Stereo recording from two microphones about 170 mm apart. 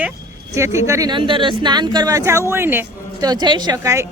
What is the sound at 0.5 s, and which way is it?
Speech, 15° right (ahead or behind).